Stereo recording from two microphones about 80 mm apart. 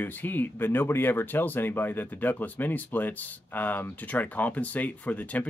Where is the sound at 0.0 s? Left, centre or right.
Left.